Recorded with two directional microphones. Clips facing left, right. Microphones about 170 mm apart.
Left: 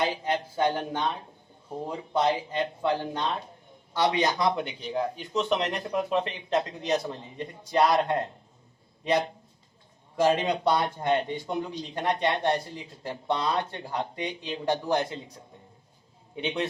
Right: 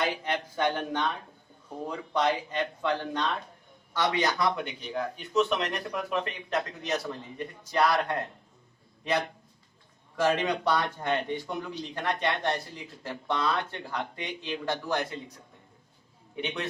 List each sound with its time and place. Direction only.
0.0 s a man's voice: 25° left (ahead or behind)
16.3 s a man's voice: 25° left (ahead or behind)